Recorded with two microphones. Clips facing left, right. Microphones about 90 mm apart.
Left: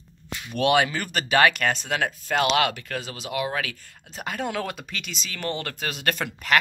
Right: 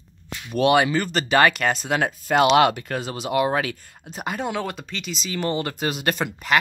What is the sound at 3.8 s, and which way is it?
Speech, 15° right (ahead or behind).